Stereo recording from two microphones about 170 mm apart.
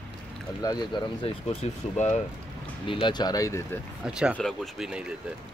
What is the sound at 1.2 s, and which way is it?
Speech, 40° left (ahead or behind).